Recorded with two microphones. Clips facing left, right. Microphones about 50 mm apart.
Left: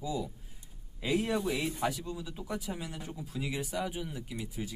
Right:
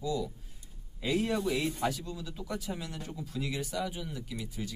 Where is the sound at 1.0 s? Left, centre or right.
Centre.